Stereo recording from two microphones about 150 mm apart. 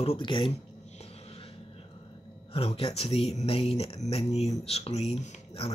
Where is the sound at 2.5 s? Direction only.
40° left (ahead or behind).